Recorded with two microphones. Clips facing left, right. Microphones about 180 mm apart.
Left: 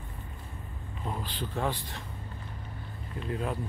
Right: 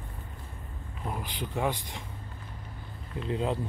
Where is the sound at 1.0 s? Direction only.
10° right (ahead or behind).